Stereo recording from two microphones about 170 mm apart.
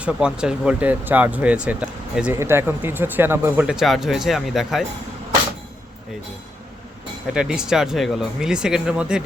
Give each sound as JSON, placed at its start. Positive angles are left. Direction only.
{"t": 0.0, "sound": "speech", "side_deg": -5}
{"t": 7.3, "sound": "speech", "side_deg": -5}